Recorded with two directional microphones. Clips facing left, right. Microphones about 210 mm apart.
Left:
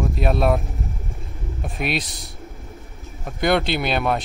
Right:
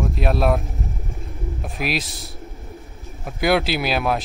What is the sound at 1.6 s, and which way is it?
A man's voice, centre (ahead or behind).